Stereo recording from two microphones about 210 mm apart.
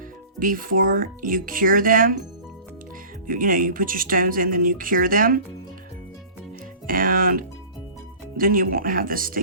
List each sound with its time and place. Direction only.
0.3 s speech: 40° right (ahead or behind)
3.2 s speech: 40° right (ahead or behind)
6.8 s speech: 40° right (ahead or behind)